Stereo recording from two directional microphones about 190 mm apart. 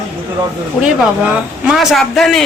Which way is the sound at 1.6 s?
5° right (ahead or behind).